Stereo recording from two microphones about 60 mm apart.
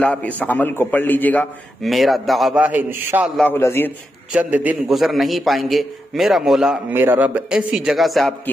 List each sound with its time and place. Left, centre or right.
0.0 s a man's voice: left
1.9 s a man's voice: centre
2.5 s a man's voice: right
3.5 s a man's voice: left
4.3 s a man's voice: right
4.8 s a man's voice: centre
6.9 s a man's voice: right
7.2 s a man's voice: right
7.5 s a man's voice: centre